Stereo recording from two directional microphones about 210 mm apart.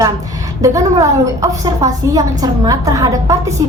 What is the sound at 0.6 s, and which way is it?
A woman's voice, 15° right (ahead or behind).